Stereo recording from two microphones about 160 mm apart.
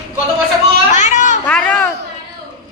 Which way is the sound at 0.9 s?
50° left (ahead or behind).